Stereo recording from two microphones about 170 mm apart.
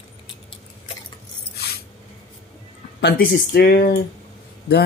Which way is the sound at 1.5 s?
70° left (ahead or behind).